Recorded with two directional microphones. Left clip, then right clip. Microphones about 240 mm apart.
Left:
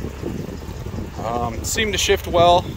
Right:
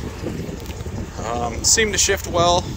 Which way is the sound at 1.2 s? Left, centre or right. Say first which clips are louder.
Left 1 dB; left.